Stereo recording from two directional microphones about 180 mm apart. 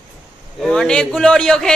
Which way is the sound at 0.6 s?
5° left (ahead or behind).